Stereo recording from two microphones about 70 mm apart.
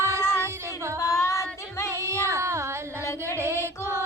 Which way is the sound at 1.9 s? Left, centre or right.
Right.